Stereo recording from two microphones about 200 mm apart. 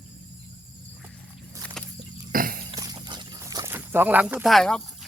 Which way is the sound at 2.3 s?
45° right (ahead or behind).